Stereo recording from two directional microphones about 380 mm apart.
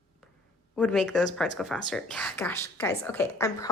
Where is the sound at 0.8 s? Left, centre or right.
Centre.